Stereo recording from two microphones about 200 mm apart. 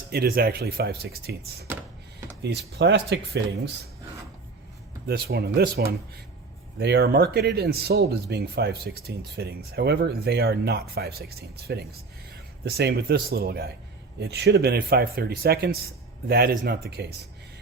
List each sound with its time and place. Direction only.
0.1 s speech: 50° right (ahead or behind)
5.0 s speech: 50° right (ahead or behind)